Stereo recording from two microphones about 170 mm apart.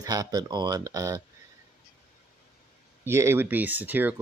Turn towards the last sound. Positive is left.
turn(degrees=-10)  # may be behind; listen again after turning